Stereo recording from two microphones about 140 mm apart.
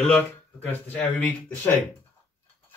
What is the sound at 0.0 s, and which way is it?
Speech, 10° left (ahead or behind).